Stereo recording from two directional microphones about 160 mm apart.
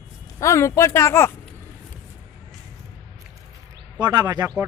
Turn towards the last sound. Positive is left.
turn(degrees=-25)  # may be behind; listen again after turning